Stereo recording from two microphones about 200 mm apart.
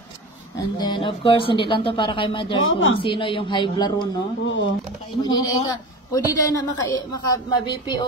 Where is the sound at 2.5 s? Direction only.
75° left (ahead or behind).